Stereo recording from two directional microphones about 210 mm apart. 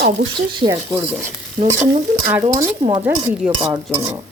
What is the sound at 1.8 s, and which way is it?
Stir, 30° right (ahead or behind).